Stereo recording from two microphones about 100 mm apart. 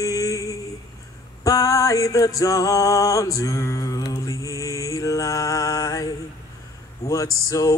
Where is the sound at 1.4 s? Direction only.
35° left (ahead or behind).